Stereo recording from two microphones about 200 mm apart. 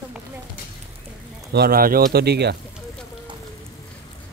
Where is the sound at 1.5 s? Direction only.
50° right (ahead or behind).